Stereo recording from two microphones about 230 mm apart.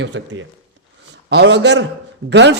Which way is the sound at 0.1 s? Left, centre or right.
Right.